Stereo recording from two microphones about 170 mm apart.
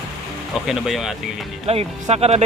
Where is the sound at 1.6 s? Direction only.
35° right (ahead or behind).